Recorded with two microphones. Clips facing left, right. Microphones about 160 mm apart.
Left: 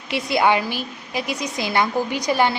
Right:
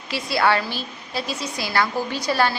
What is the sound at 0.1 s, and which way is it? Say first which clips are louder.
A woman's voice: left 2 dB; 20° left (ahead or behind).